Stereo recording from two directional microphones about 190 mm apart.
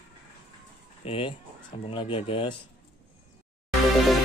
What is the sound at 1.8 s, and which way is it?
Mantra, 30° left (ahead or behind).